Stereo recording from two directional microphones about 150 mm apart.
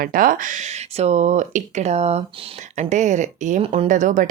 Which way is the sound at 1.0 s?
50° right (ahead or behind).